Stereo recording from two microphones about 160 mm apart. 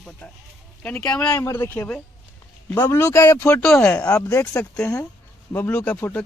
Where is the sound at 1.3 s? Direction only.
20° left (ahead or behind).